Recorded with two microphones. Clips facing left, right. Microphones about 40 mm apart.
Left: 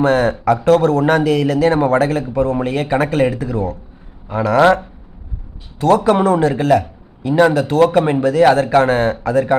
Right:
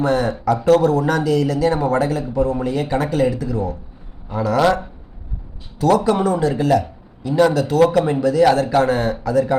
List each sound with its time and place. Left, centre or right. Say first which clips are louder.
0.0 s a man's voice: left 4 dB; left
6.2 s a man's voice: left 4 dB; left